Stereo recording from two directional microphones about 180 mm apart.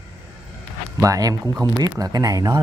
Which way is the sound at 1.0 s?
20° right (ahead or behind).